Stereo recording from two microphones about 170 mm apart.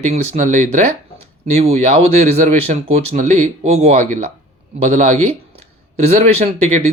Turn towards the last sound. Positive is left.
turn(degrees=-40)  # may be behind; listen again after turning